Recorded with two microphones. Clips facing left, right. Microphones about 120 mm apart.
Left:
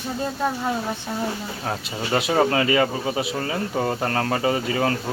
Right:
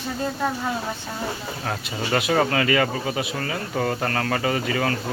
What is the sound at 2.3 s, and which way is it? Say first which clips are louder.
Speech: left 2 dB; 20° left (ahead or behind).